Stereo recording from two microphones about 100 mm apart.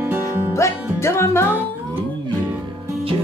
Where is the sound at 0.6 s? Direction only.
25° left (ahead or behind).